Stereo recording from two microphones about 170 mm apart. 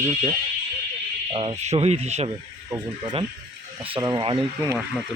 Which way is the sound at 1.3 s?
35° right (ahead or behind).